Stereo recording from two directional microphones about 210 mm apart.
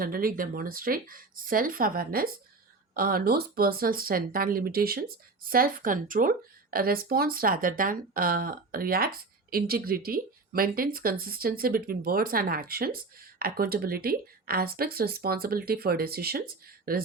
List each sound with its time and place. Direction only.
0.0 s speech: 45° right (ahead or behind)